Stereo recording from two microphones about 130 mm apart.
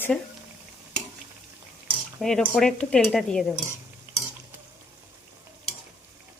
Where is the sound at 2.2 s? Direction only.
5° left (ahead or behind).